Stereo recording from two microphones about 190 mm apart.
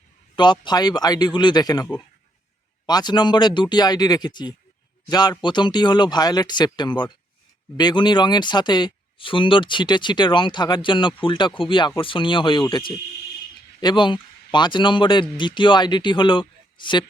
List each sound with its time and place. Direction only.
0.3 s speech: 25° left (ahead or behind)